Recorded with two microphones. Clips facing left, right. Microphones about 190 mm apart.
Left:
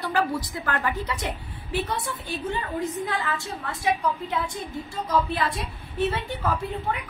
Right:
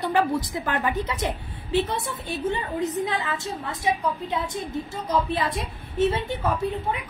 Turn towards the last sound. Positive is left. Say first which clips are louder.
# right 2 dB
turn(degrees=-20)  # may be behind; listen again after turning